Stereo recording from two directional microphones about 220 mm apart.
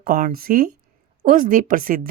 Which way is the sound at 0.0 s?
40° right (ahead or behind).